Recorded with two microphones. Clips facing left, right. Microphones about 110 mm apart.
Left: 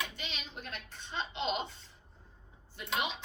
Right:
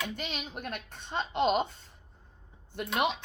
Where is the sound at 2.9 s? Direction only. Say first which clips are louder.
Right 6 dB; 60° right (ahead or behind).